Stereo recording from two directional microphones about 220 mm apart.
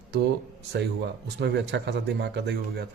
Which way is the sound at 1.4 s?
50° right (ahead or behind).